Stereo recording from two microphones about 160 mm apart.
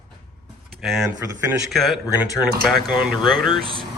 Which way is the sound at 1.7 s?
Centre (ahead or behind).